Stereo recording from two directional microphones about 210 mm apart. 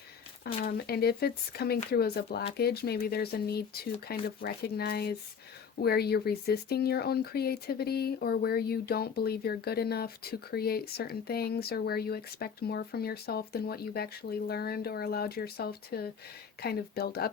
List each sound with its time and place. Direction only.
0.4 s speech: 45° left (ahead or behind)